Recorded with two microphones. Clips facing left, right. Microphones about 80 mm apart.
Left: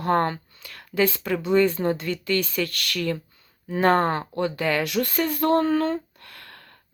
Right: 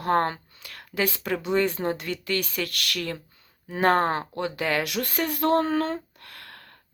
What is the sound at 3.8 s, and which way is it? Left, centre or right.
A woman's voice, centre.